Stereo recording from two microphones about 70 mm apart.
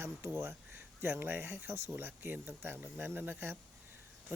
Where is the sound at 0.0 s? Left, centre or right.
Right.